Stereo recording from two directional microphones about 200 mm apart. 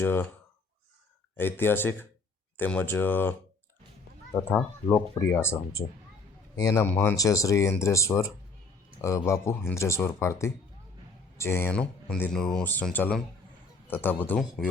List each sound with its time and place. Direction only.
0.0 s speech: 10° left (ahead or behind)
1.4 s speech: 10° left (ahead or behind)
4.4 s speech: 10° left (ahead or behind)